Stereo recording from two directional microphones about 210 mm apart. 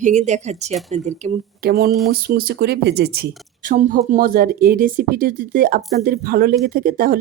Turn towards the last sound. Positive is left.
turn(degrees=-45)  # may be behind; listen again after turning